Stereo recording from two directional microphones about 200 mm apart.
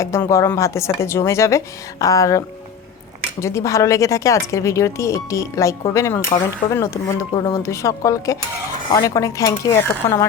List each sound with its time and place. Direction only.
0.0 s speech: 15° left (ahead or behind)
3.4 s speech: 15° left (ahead or behind)